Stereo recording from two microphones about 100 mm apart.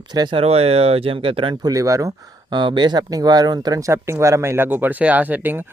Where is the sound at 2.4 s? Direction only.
50° right (ahead or behind); by 5.6 s 20° right (ahead or behind).